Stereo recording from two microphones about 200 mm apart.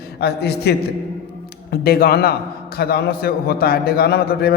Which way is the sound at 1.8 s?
50° left (ahead or behind).